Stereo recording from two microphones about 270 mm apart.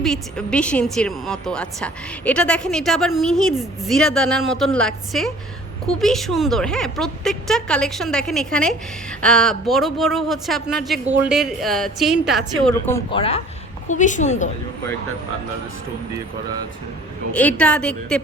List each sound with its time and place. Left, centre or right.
0.0 s a woman's voice: centre
12.6 s a woman's voice: centre; by 14.5 s left
17.3 s a woman's voice: centre